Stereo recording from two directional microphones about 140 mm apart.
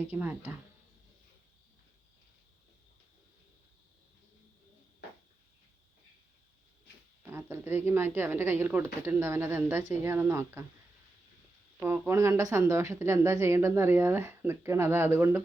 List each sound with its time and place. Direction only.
0.1 s speech: 15° right (ahead or behind)
7.2 s speech: 15° right (ahead or behind)
11.8 s a woman's voice: 15° right (ahead or behind)